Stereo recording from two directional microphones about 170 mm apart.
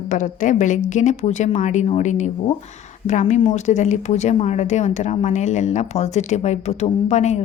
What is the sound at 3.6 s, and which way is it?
Speech, 45° left (ahead or behind).